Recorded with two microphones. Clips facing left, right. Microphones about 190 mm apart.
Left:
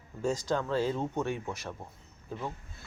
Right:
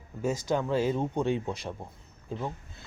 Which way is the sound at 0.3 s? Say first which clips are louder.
Right 5 dB; 15° right (ahead or behind).